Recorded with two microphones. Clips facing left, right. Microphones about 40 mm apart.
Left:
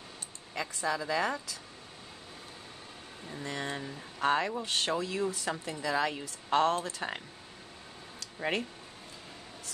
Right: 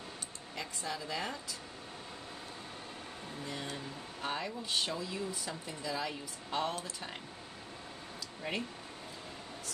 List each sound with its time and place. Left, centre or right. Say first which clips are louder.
0.6 s speech: left 7 dB; left
3.6 s speech: left 4 dB; left
8.2 s a sound: left 6 dB; left